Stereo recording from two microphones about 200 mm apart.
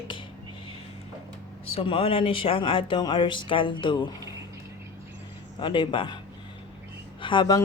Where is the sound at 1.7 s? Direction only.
25° left (ahead or behind).